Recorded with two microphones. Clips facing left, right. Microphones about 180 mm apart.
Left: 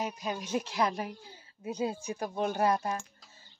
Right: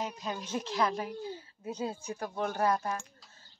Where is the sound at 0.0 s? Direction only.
10° left (ahead or behind).